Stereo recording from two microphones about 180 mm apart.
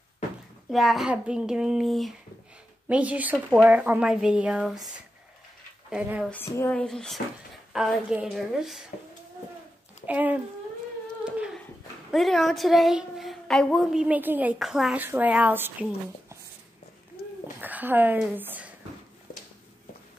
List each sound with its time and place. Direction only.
0.7 s a woman's voice: centre (ahead or behind)
6.4 s speech: 15° left (ahead or behind)
6.8 s a woman's voice: 5° left (ahead or behind)
10.0 s a woman's voice: 10° right (ahead or behind)
11.2 s a sound: 5° right (ahead or behind)
12.1 s a woman's voice: centre (ahead or behind)
17.2 s a sound: 60° left (ahead or behind)
17.6 s speech: 10° right (ahead or behind)